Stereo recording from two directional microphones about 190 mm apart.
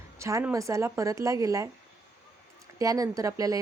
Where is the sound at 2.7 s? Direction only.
20° right (ahead or behind).